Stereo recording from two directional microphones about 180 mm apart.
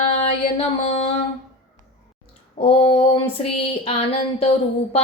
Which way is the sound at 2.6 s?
30° left (ahead or behind).